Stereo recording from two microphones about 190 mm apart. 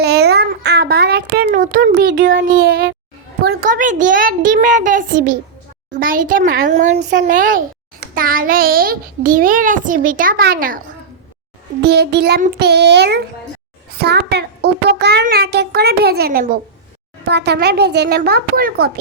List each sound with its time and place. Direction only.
0.0 s a sound: 60° right (ahead or behind); by 1.9 s 45° right (ahead or behind)
1.9 s a child's voice: 60° right (ahead or behind); by 2.4 s 85° right
2.4 s a child's voice: 50° right (ahead or behind)
11.8 s a child's voice: 60° right (ahead or behind)
17.2 s a child's voice: 65° right (ahead or behind)